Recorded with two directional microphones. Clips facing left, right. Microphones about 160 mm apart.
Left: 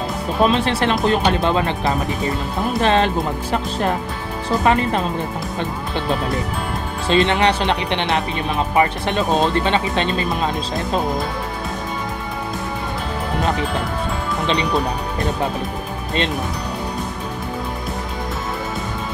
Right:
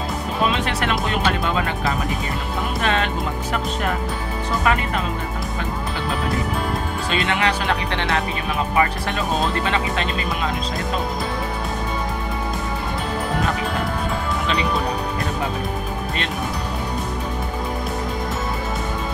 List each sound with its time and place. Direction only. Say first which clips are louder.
0.5 s speech: left 4 dB; 30° left (ahead or behind)
4.5 s speech: left 5 dB; 30° left (ahead or behind)
7.1 s speech: left 6 dB; 30° left (ahead or behind)